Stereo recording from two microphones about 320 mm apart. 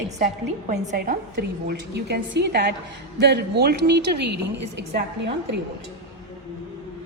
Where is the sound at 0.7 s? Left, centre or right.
Right.